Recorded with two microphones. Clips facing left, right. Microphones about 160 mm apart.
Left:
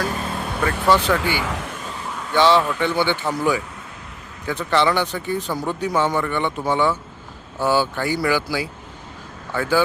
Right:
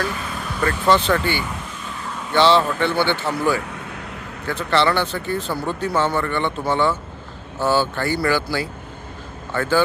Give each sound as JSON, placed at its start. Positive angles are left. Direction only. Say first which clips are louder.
{"t": 0.6, "sound": "speech", "louder": "right 1 dB", "side_deg": 10}
{"t": 1.4, "sound": "vehicle", "louder": "left 2 dB", "side_deg": 85}
{"t": 2.3, "sound": "speech", "louder": "right 1 dB", "side_deg": 10}